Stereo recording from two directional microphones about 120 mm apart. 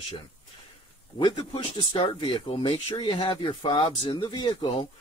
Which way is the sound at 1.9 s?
50° left (ahead or behind).